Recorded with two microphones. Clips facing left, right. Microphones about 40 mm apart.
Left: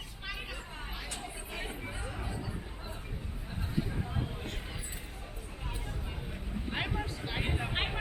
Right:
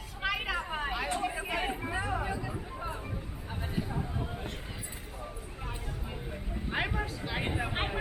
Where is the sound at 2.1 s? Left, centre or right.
Right.